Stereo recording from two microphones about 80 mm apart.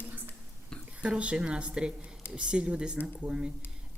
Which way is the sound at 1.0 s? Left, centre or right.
Centre.